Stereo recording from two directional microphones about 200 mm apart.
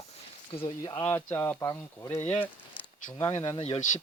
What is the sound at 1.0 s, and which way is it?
Speech, 10° left (ahead or behind).